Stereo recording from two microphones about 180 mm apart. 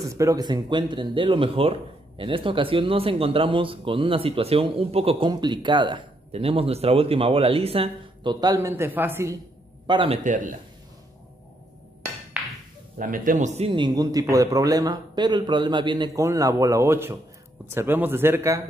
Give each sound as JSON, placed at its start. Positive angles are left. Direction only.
{"t": 0.0, "sound": "speech", "side_deg": -15}
{"t": 9.8, "sound": "speech", "side_deg": -30}
{"t": 10.2, "sound": "a man's voice", "side_deg": -45}
{"t": 12.4, "sound": "a sound", "side_deg": -5}
{"t": 13.0, "sound": "a man's voice", "side_deg": -50}
{"t": 13.7, "sound": "a man's voice", "side_deg": -25}